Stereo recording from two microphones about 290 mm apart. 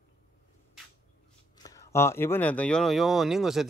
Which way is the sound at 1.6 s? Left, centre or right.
Centre.